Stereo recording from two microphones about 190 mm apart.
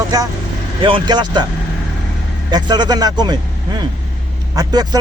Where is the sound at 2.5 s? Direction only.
20° right (ahead or behind).